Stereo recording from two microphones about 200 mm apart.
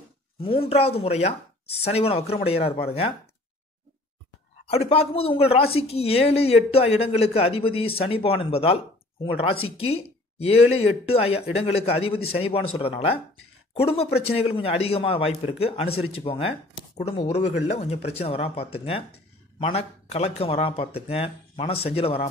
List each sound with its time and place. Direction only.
0.4 s speech: 30° left (ahead or behind)
4.6 s speech: 30° left (ahead or behind)